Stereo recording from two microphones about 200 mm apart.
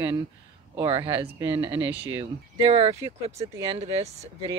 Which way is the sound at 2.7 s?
30° right (ahead or behind).